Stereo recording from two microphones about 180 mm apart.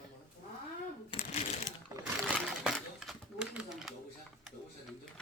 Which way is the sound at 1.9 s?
20° right (ahead or behind).